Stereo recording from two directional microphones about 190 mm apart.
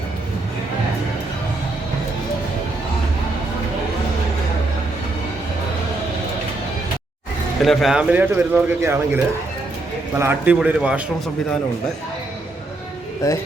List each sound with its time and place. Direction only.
7.6 s a man's voice: centre (ahead or behind)
13.2 s speech: 15° left (ahead or behind)